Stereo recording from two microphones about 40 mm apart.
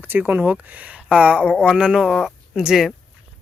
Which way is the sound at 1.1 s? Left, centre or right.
Right.